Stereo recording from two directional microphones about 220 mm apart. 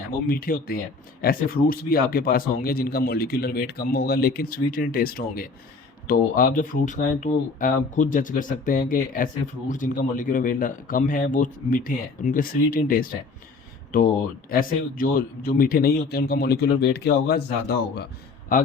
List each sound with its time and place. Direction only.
0.3 s speech: 40° left (ahead or behind)